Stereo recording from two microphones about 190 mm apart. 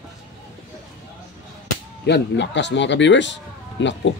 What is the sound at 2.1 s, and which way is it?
Speech, 70° left (ahead or behind).